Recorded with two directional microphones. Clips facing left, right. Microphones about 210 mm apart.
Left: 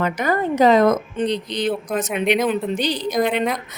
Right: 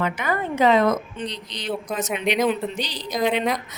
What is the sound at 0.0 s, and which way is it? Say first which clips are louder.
A woman's voice: left 4 dB; 40° left (ahead or behind).